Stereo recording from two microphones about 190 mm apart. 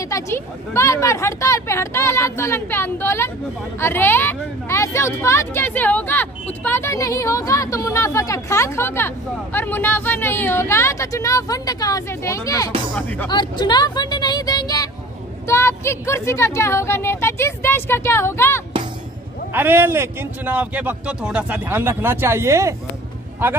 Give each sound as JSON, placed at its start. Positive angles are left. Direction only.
{"t": 0.1, "sound": "speech", "side_deg": 15}
{"t": 19.5, "sound": "a man's voice", "side_deg": -10}